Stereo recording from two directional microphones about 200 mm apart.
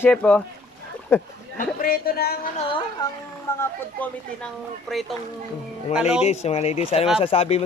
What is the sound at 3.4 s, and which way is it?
Speech, 10° left (ahead or behind).